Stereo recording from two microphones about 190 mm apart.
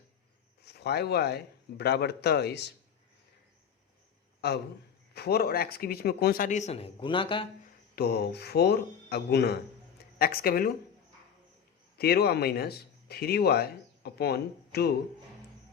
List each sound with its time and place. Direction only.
0.6 s speech: 60° left (ahead or behind)
4.4 s a sound: 60° left (ahead or behind)
5.1 s a man's voice: 55° left (ahead or behind); by 7.4 s 25° left (ahead or behind)
7.9 s a man's voice: 55° left (ahead or behind)
11.9 s speech: 55° left (ahead or behind)